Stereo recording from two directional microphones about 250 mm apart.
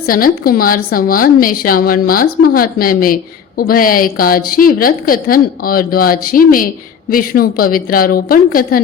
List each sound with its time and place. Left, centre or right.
0.0 s a woman's voice: left